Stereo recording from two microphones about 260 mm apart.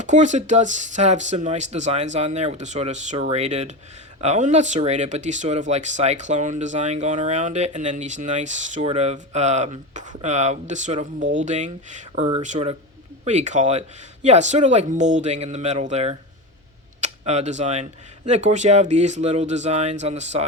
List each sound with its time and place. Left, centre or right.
0.0 s speech: right